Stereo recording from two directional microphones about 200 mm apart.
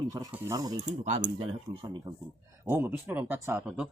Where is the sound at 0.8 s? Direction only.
35° right (ahead or behind).